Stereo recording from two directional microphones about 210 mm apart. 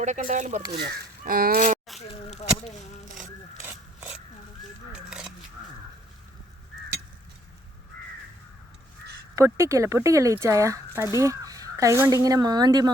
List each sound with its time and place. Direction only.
0.0 s speech: 35° right (ahead or behind)
2.0 s a sound: 30° left (ahead or behind)
9.3 s speech: 15° right (ahead or behind)